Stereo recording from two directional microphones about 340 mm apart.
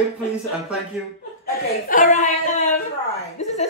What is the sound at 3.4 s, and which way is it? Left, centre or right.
Music, centre.